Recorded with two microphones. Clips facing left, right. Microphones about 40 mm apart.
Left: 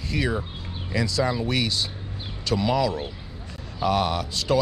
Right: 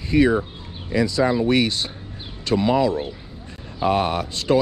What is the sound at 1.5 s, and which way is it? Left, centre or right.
Speech, right.